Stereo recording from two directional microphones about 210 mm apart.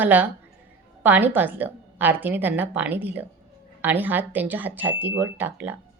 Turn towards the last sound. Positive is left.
turn(degrees=-10)  # may be behind; listen again after turning